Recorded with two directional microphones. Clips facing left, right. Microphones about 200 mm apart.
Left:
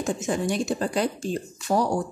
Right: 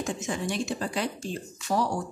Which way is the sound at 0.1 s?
40° left (ahead or behind).